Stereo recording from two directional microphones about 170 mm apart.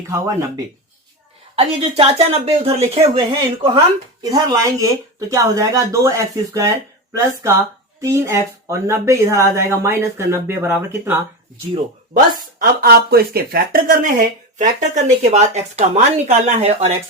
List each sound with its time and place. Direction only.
0.1 s speech: 15° right (ahead or behind)
1.5 s speech: 35° right (ahead or behind)
3.8 s speech: 20° right (ahead or behind)
12.1 s speech: 55° right (ahead or behind); by 16.9 s 40° right (ahead or behind)